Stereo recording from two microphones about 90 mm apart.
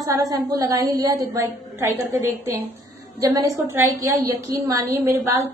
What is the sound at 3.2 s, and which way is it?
A woman's voice, 40° right (ahead or behind).